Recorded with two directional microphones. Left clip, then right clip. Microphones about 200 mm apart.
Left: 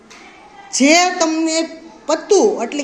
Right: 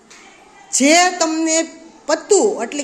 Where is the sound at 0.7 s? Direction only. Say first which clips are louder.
Even; 15° right (ahead or behind).